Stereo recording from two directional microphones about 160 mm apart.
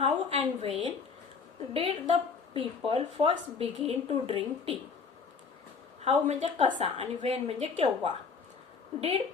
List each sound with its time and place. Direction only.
0.0 s a sound: 35° right (ahead or behind)
1.7 s speech: 35° right (ahead or behind)
6.0 s a woman's voice: 45° right (ahead or behind)